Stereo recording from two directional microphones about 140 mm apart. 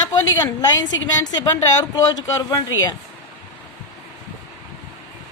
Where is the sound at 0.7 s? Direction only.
30° left (ahead or behind).